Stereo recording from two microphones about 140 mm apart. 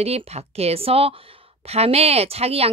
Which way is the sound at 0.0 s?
45° right (ahead or behind).